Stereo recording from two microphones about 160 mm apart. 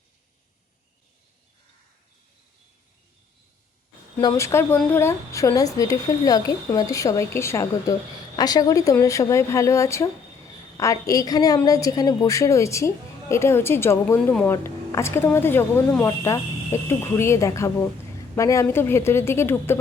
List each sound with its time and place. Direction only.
4.2 s speech: 20° left (ahead or behind)